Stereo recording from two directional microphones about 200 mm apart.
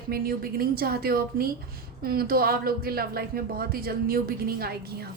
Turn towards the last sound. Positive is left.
turn(degrees=-50)  # may be behind; listen again after turning